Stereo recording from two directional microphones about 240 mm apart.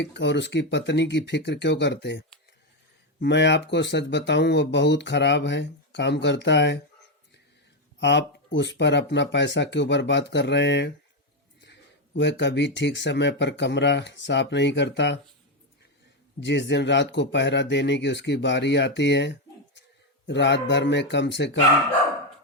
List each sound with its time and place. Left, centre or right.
0.0 s speech: left
7.9 s speech: left
16.4 s speech: left